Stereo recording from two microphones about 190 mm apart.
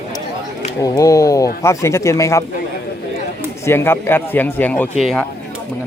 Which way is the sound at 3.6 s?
15° left (ahead or behind).